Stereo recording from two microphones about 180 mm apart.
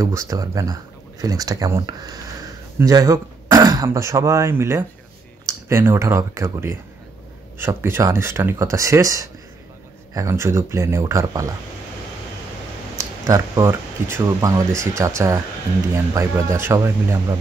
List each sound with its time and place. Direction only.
0.0 s speech: 15° right (ahead or behind)
12.9 s speech: 15° right (ahead or behind)